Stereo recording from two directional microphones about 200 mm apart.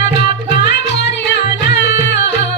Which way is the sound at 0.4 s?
60° left (ahead or behind).